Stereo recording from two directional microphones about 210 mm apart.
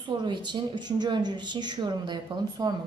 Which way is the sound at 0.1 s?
20° right (ahead or behind).